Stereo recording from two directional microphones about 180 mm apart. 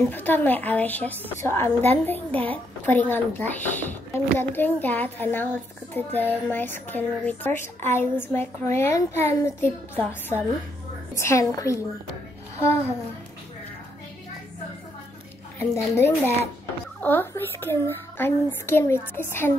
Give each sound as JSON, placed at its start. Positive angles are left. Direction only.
{"t": 0.1, "sound": "a woman's voice", "side_deg": 10}
{"t": 15.9, "sound": "a woman's voice", "side_deg": 10}